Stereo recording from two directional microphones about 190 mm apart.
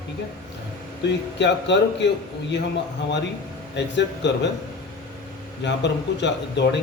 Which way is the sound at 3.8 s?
65° left (ahead or behind).